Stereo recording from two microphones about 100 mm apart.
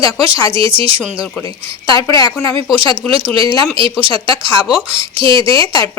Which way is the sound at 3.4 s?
55° right (ahead or behind).